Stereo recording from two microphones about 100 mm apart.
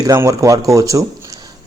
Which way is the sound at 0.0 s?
35° right (ahead or behind).